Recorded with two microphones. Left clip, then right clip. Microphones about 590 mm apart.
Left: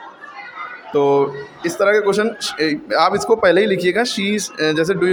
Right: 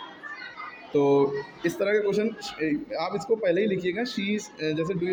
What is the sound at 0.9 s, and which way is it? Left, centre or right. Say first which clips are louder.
Speech: left 6 dB; right.